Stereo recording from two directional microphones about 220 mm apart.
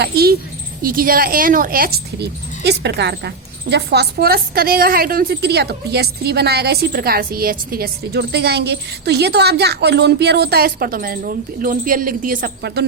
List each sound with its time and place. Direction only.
0.0 s speech: 45° right (ahead or behind)